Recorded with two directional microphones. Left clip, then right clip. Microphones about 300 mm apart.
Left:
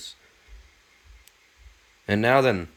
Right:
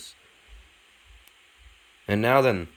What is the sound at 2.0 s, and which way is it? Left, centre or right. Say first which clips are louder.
Speech: left 1 dB; centre.